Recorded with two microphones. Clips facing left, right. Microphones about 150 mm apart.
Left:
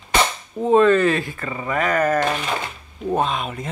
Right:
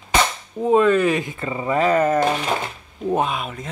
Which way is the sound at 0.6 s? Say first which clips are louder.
Left 1 dB; 10° right (ahead or behind).